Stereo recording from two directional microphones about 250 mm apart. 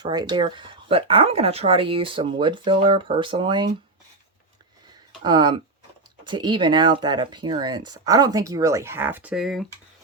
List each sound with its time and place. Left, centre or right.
0.0 s speech: centre
5.2 s speech: centre